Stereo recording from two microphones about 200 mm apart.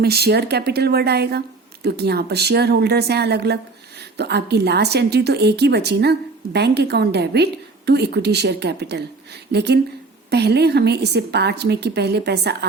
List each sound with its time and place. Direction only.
0.0 s a woman's voice: 50° right (ahead or behind)